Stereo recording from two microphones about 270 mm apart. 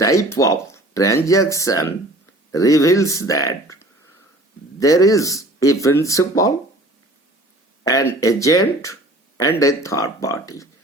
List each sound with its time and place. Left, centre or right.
0.0 s speech: centre
7.9 s speech: centre